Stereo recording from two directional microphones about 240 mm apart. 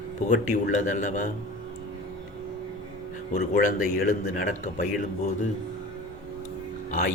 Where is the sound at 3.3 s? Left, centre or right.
Left.